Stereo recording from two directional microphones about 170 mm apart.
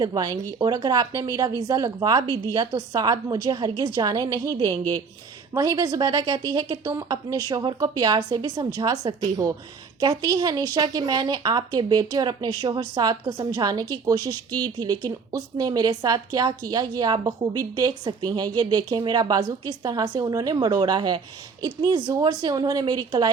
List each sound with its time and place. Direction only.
0.0 s speech: 25° right (ahead or behind)